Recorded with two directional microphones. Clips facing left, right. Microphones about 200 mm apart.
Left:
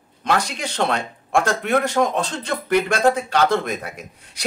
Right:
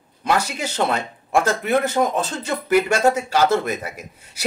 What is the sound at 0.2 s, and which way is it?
Speech, 5° right (ahead or behind).